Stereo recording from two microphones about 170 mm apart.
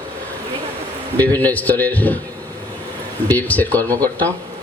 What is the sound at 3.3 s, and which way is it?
Speech, 10° left (ahead or behind).